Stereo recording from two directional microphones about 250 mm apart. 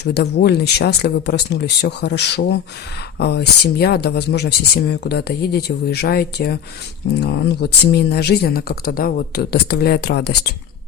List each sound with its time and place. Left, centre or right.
0.0 s speech: left